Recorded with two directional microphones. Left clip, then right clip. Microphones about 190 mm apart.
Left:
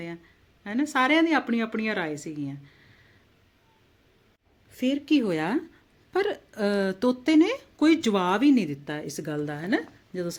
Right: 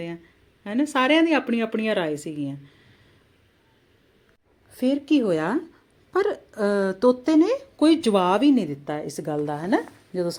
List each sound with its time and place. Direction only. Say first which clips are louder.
0.6 s speech: right 2 dB; centre (ahead or behind)
4.8 s speech: right 3 dB; 10° left (ahead or behind)
9.5 s a woman's voice: right 4 dB; 35° left (ahead or behind)